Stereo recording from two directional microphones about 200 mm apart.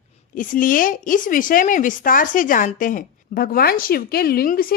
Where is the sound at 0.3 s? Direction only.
40° left (ahead or behind).